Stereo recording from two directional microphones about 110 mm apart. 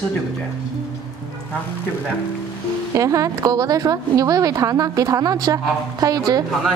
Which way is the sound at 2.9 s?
30° right (ahead or behind).